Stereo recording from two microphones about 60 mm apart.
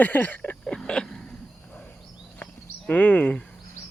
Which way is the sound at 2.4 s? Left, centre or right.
Left.